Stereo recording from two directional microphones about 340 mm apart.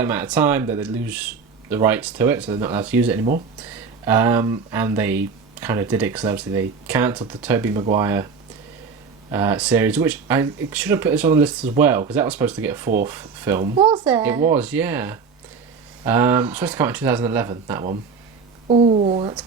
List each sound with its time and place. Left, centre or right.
0.0 s speech: centre
9.3 s speech: centre
14.0 s speech: centre